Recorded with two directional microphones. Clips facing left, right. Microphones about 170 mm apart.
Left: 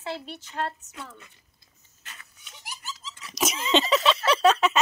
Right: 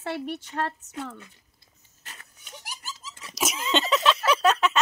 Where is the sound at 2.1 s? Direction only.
45° right (ahead or behind).